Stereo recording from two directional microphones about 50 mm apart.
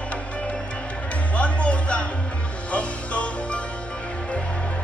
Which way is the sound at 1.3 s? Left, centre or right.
Left.